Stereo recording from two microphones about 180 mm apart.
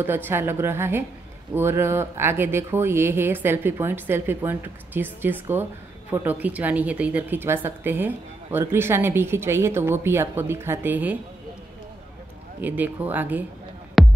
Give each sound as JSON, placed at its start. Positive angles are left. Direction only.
{"t": 0.0, "sound": "speech", "side_deg": -10}
{"t": 12.5, "sound": "speech", "side_deg": -10}
{"t": 14.0, "sound": "music", "side_deg": 0}